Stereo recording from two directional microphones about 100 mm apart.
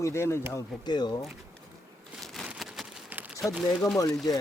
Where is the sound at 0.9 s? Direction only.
45° left (ahead or behind).